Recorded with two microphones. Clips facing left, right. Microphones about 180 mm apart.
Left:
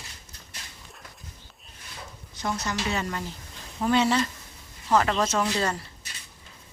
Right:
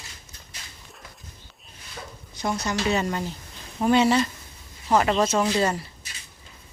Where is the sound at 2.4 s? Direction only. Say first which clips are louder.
Right 3 dB; 15° right (ahead or behind).